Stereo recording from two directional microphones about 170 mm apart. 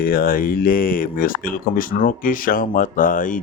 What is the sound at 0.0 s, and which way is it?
Speech, 60° left (ahead or behind).